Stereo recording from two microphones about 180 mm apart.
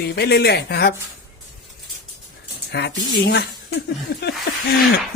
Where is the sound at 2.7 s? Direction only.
65° left (ahead or behind).